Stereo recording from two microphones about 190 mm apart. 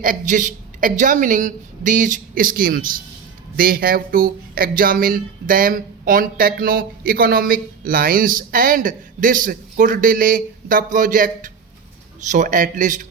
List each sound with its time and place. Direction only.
0.0 s speech: 45° right (ahead or behind)